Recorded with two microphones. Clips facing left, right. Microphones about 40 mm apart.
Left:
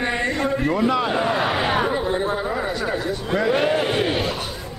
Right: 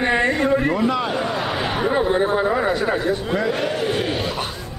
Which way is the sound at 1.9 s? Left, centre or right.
Centre.